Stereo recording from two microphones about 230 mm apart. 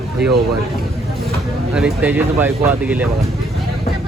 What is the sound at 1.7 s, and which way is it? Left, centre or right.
Speech, centre.